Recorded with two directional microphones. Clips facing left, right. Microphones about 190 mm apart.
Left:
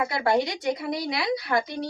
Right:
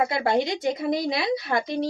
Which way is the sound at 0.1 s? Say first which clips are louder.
Right 1 dB; 25° right (ahead or behind).